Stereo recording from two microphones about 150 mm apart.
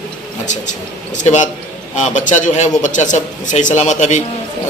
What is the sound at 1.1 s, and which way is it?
A man's voice, 55° left (ahead or behind).